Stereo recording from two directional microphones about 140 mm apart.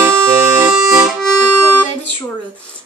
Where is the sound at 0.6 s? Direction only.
10° right (ahead or behind).